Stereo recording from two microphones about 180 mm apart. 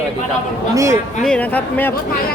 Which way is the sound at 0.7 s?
15° right (ahead or behind).